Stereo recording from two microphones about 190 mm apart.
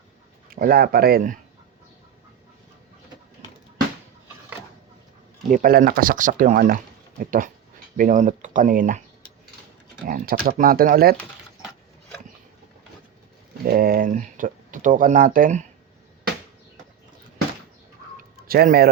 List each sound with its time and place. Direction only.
0.5 s speech: 50° right (ahead or behind)
5.5 s speech: 45° right (ahead or behind)
10.1 s speech: 50° right (ahead or behind)
13.7 s speech: 50° right (ahead or behind)
18.3 s speech: 50° right (ahead or behind)